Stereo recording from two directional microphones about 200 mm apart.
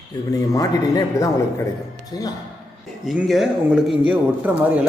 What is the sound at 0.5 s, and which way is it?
A man's voice, 15° left (ahead or behind).